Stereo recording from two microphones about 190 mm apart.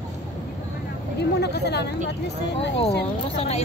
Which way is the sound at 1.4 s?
60° left (ahead or behind).